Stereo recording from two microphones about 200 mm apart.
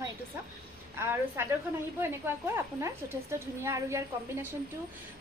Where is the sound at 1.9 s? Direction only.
10° right (ahead or behind).